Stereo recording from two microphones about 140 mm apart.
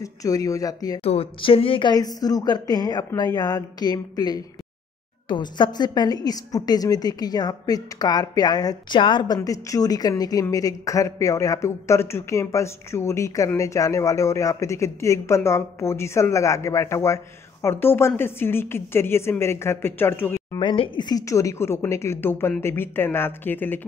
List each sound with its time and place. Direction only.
0.0 s a woman's voice: 25° left (ahead or behind)
1.0 s a woman's voice: 45° left (ahead or behind); by 20.4 s 15° left (ahead or behind)
20.5 s a woman's voice: 40° left (ahead or behind); by 23.9 s 15° left (ahead or behind)